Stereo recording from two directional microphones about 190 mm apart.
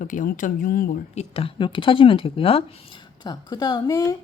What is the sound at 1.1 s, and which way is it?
Speech, 35° left (ahead or behind).